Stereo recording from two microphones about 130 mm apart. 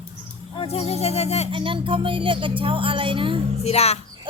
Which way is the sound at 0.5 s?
45° left (ahead or behind).